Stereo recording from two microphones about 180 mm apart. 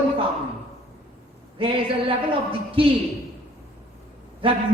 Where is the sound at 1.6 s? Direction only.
30° right (ahead or behind).